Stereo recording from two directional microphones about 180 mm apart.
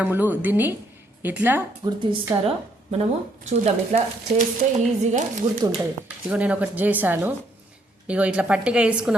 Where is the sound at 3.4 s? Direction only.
40° right (ahead or behind).